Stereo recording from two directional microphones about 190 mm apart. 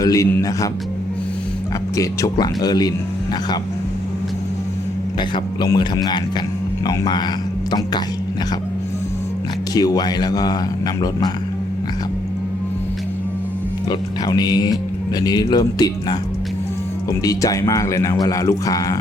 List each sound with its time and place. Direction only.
0.0 s speech: 15° left (ahead or behind)
2.0 s speech: 20° left (ahead or behind)
5.3 s speech: 20° left (ahead or behind)
9.7 s speech: 20° left (ahead or behind)
14.3 s speech: 20° left (ahead or behind)
17.2 s speech: 20° left (ahead or behind)